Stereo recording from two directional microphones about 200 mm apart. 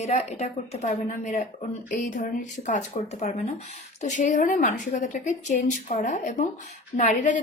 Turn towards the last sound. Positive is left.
turn(degrees=40)  # may be behind; listen again after turning